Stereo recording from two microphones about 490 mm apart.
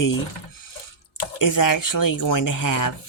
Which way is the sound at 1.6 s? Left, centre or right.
Left.